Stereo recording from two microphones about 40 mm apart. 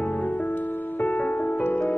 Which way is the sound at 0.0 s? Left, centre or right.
Left.